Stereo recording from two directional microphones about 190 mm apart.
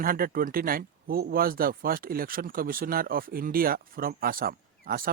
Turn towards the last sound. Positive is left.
turn(degrees=-50)  # may be behind; listen again after turning